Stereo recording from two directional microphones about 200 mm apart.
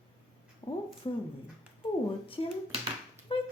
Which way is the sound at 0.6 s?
30° left (ahead or behind).